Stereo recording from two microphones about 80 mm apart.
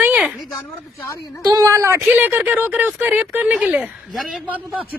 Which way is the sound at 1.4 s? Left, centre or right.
Right.